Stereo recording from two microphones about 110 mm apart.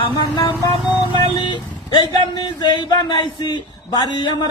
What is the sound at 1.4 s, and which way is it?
Speech, 45° left (ahead or behind).